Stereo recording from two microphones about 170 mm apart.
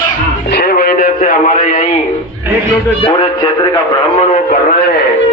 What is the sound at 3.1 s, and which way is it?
Music, 25° left (ahead or behind).